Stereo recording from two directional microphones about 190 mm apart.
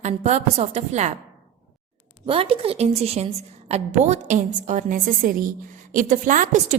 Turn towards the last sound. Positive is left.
turn(degrees=-40)  # may be behind; listen again after turning